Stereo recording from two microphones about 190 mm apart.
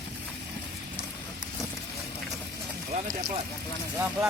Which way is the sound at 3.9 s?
10° right (ahead or behind).